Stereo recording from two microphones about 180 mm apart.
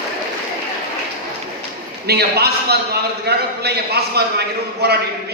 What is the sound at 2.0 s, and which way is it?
A man's voice, 60° right (ahead or behind).